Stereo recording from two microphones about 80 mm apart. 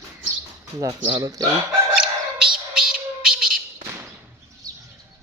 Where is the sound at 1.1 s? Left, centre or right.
Right.